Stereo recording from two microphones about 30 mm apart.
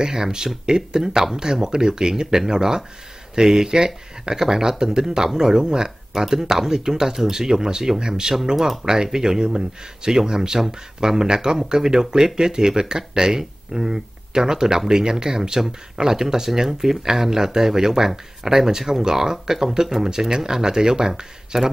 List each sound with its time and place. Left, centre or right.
0.0 s speech: right